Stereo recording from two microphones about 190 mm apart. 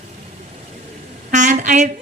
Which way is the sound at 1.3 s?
40° right (ahead or behind).